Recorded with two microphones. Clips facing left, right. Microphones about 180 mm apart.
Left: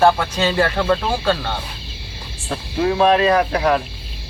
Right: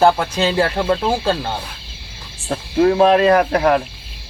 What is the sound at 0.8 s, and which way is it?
Speech, 25° right (ahead or behind).